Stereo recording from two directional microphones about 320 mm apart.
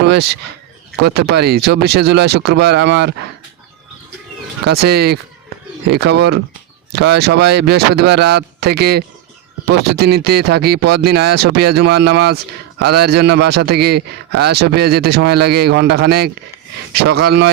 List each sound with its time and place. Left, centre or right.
0.0 s a man's voice: right
4.6 s a man's voice: right